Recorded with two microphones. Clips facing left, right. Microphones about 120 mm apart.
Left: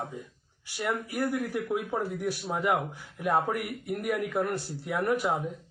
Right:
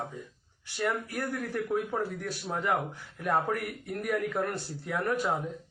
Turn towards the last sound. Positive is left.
turn(degrees=15)  # may be behind; listen again after turning